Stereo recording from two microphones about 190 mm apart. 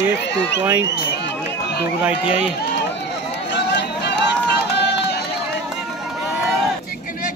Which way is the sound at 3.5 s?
60° left (ahead or behind).